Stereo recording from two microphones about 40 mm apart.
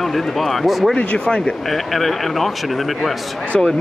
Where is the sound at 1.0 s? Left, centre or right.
Left.